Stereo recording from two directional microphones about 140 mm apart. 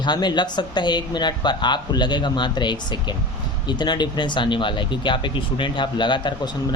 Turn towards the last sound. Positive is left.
turn(degrees=35)  # may be behind; listen again after turning